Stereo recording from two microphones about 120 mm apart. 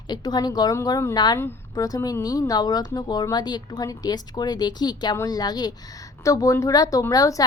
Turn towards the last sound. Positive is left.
turn(degrees=30)  # may be behind; listen again after turning